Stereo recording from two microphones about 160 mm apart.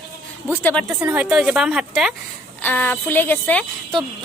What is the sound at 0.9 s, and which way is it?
A woman's voice, 10° right (ahead or behind).